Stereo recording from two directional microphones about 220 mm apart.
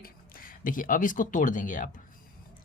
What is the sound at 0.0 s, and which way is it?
Speech, 40° left (ahead or behind).